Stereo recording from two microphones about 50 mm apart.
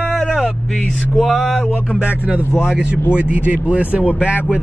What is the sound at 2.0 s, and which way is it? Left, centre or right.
Speech, right.